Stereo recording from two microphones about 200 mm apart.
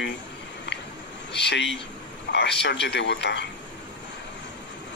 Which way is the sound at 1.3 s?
60° left (ahead or behind).